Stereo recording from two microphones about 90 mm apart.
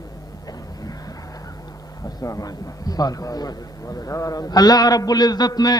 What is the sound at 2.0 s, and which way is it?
A man's voice, 40° left (ahead or behind).